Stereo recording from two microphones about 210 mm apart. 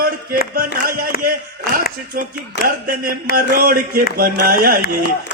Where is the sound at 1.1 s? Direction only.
45° left (ahead or behind).